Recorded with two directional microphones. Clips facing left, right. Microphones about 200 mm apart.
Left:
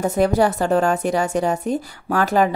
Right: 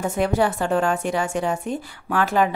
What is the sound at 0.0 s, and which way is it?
A woman's voice, 40° left (ahead or behind).